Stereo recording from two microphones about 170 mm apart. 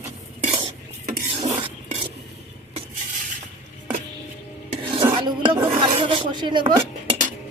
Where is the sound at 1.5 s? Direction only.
30° right (ahead or behind).